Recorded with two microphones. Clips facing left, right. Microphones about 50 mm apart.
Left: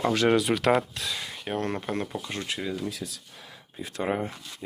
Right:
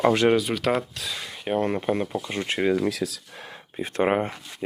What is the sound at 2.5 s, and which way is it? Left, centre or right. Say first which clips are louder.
Speech: right 11 dB; right.